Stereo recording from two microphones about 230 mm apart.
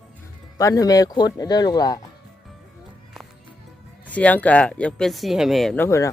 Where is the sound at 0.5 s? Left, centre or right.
Centre.